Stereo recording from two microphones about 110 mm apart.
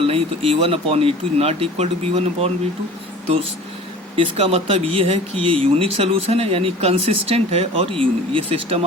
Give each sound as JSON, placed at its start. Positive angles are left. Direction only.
{"t": 0.1, "sound": "speech", "side_deg": -60}
{"t": 4.2, "sound": "speech", "side_deg": -60}